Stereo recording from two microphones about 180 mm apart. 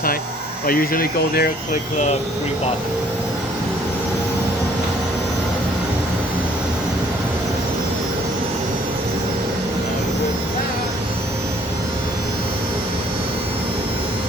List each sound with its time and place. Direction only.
0.7 s speech: 55° left (ahead or behind)